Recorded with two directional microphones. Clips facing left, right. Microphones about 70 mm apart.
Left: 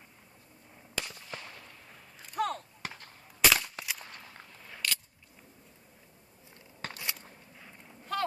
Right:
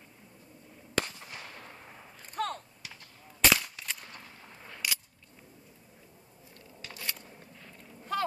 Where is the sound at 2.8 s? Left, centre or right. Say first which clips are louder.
Left 10 dB; left.